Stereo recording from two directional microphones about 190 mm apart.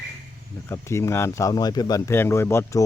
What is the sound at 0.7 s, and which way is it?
A man's voice, 15° left (ahead or behind).